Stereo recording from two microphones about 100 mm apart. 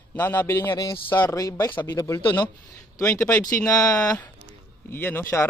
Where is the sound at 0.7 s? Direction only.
50° left (ahead or behind).